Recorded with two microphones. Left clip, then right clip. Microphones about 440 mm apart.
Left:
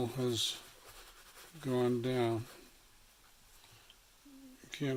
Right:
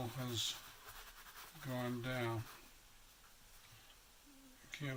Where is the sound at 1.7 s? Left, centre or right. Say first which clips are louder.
Left 10 dB; centre.